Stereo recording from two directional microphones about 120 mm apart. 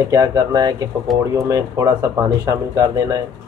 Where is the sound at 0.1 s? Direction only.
30° right (ahead or behind).